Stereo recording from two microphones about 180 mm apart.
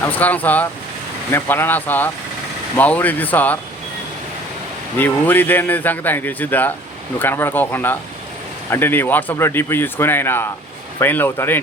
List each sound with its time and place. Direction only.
0.0 s speech: 10° left (ahead or behind)
4.9 s speech: 10° left (ahead or behind)